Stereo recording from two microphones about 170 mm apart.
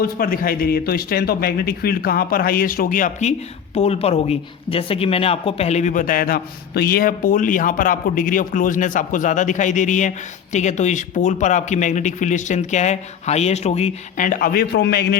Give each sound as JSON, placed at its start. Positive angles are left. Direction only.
{"t": 0.0, "sound": "speech", "side_deg": 55}
{"t": 3.8, "sound": "speech", "side_deg": 35}